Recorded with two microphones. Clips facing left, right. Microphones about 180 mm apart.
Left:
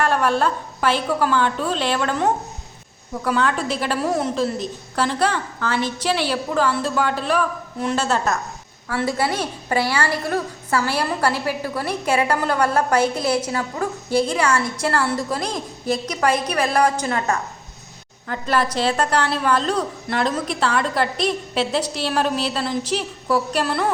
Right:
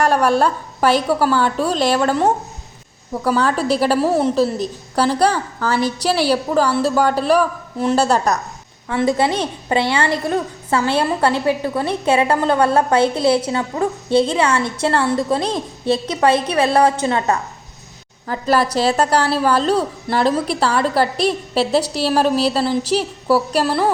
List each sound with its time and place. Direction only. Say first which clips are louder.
0.0 s a woman's voice: right 4 dB; 40° right (ahead or behind)
8.9 s a woman's voice: right 5 dB; 20° right (ahead or behind)
18.3 s a woman's voice: right 4 dB; 35° right (ahead or behind)